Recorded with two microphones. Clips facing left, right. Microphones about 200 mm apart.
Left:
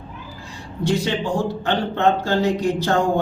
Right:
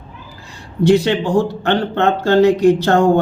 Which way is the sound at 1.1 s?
70° right (ahead or behind).